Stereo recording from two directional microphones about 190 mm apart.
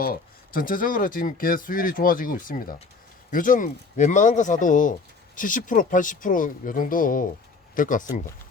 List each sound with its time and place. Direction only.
0.0 s speech: 50° left (ahead or behind)